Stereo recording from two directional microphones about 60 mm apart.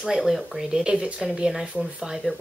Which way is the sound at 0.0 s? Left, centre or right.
Centre.